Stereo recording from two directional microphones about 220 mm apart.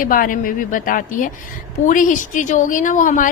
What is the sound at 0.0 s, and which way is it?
A woman's voice, 40° left (ahead or behind).